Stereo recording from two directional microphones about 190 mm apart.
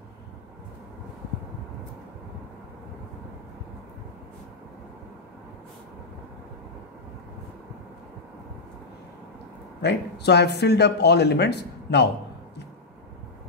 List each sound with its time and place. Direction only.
9.8 s speech: 60° left (ahead or behind)